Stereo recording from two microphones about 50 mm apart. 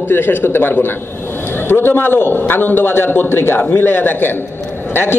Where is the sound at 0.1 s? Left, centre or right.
Left.